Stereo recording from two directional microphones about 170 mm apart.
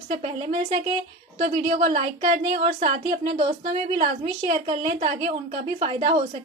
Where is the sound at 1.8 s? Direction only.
45° right (ahead or behind).